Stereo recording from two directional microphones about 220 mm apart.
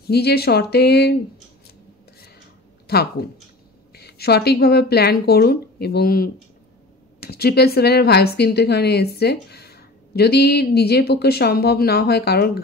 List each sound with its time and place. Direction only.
0.0 s a woman's voice: 45° left (ahead or behind)
2.9 s a woman's voice: 45° left (ahead or behind)